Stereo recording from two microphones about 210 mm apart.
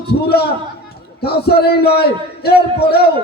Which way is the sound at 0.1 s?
50° left (ahead or behind).